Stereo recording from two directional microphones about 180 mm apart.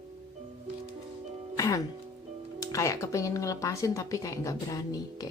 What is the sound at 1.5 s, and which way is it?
Music, 20° left (ahead or behind).